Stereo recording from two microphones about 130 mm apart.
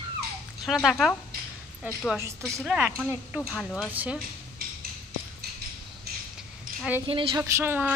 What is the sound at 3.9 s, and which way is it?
Speech, 10° right (ahead or behind).